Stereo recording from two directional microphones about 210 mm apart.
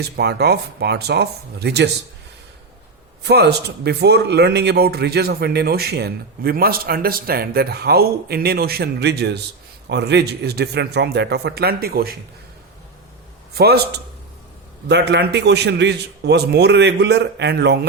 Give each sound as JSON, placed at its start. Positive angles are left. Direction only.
{"t": 0.0, "sound": "speech", "side_deg": -50}
{"t": 3.2, "sound": "speech", "side_deg": -50}
{"t": 13.5, "sound": "a man's voice", "side_deg": -50}
{"t": 14.8, "sound": "speech", "side_deg": -55}